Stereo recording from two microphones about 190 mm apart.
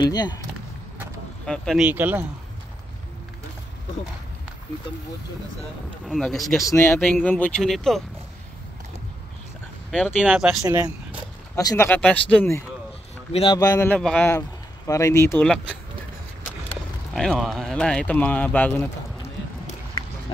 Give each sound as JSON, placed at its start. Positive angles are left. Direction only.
{"t": 0.0, "sound": "speech", "side_deg": 20}
{"t": 1.4, "sound": "speech", "side_deg": 5}
{"t": 1.9, "sound": "speech", "side_deg": -10}
{"t": 6.0, "sound": "speech", "side_deg": 0}
{"t": 6.6, "sound": "a man's voice", "side_deg": 15}
{"t": 9.8, "sound": "speech", "side_deg": 5}
{"t": 10.2, "sound": "speech", "side_deg": -5}
{"t": 10.6, "sound": "speech", "side_deg": -20}
{"t": 11.5, "sound": "a man's voice", "side_deg": 15}
{"t": 13.3, "sound": "speech", "side_deg": 30}
{"t": 13.6, "sound": "a man's voice", "side_deg": 15}
{"t": 16.6, "sound": "speech", "side_deg": 5}